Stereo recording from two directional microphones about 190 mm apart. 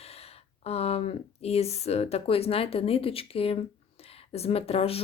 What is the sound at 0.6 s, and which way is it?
Speech, 35° left (ahead or behind).